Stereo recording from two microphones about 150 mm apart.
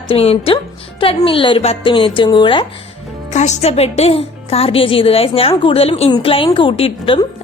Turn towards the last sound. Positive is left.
turn(degrees=40)  # may be behind; listen again after turning